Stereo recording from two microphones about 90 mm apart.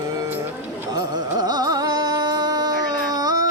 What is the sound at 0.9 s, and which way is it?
Carnatic music, 50° right (ahead or behind).